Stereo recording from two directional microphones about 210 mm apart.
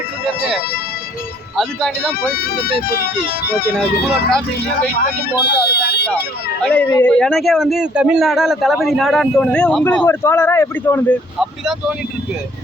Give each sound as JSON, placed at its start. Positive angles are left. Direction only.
{"t": 1.5, "sound": "speech", "side_deg": 0}
{"t": 3.2, "sound": "speech", "side_deg": 45}
{"t": 3.8, "sound": "speech", "side_deg": 0}
{"t": 5.5, "sound": "speech", "side_deg": 50}
{"t": 6.6, "sound": "speech", "side_deg": 5}
{"t": 11.3, "sound": "speech", "side_deg": 0}